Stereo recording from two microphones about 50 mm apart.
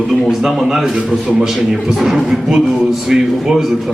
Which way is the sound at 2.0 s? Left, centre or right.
Centre.